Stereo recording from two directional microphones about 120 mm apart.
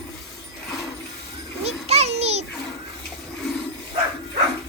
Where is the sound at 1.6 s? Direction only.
60° right (ahead or behind).